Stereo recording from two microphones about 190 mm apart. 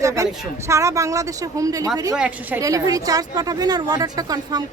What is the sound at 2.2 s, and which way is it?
Speech, 5° right (ahead or behind).